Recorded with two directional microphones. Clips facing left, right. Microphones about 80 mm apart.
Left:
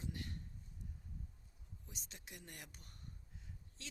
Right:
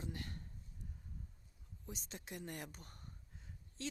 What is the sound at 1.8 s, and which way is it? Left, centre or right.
Speech, right.